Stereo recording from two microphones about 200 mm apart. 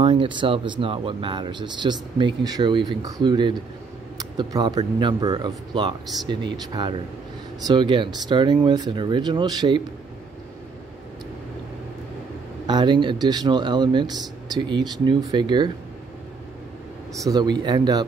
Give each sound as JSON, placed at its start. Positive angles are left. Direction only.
{"t": 0.0, "sound": "speech", "side_deg": -25}
{"t": 12.6, "sound": "speech", "side_deg": -20}
{"t": 17.2, "sound": "speech", "side_deg": -20}